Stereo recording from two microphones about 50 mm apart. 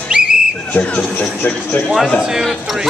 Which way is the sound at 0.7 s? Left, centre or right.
Left.